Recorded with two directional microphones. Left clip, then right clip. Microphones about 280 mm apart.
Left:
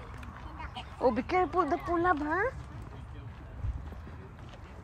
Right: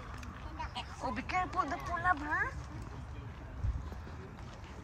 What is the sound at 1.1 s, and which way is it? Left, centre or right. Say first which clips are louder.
Speech: left 6 dB; centre.